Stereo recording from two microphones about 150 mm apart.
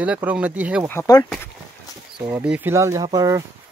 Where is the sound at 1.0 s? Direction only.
25° left (ahead or behind).